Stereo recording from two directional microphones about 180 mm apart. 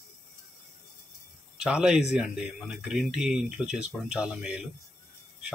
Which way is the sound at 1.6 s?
5° right (ahead or behind).